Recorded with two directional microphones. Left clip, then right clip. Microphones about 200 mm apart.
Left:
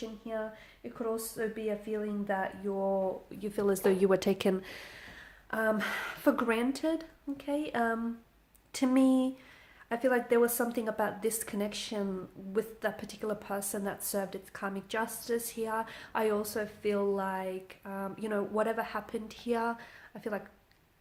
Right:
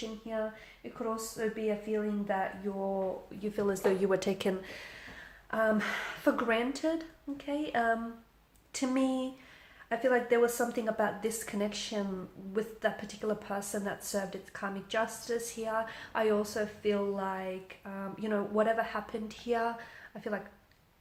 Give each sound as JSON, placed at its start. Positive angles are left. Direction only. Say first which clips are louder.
{"t": 0.3, "sound": "speech", "louder": "right 2 dB", "side_deg": 50}